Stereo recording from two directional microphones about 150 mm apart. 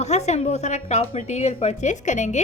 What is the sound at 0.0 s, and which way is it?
A woman's voice, 50° left (ahead or behind).